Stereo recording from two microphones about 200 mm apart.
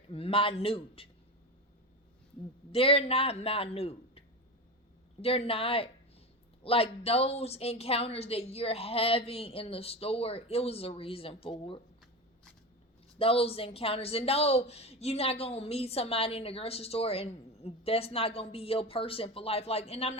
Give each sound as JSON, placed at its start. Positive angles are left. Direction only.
{"t": 0.1, "sound": "speech", "side_deg": 25}
{"t": 2.7, "sound": "speech", "side_deg": 30}
{"t": 5.2, "sound": "speech", "side_deg": 30}
{"t": 13.1, "sound": "speech", "side_deg": 30}